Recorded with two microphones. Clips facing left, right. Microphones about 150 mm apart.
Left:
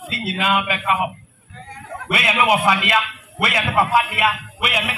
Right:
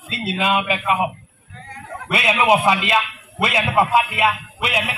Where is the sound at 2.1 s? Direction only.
25° right (ahead or behind).